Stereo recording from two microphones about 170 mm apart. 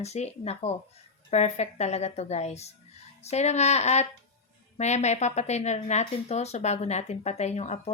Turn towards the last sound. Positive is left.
turn(degrees=40)  # may be behind; listen again after turning